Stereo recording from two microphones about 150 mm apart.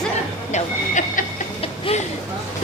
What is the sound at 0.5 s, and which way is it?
Speech, 55° left (ahead or behind).